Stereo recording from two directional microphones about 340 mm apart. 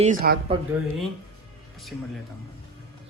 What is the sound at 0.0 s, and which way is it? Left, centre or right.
Speech, right.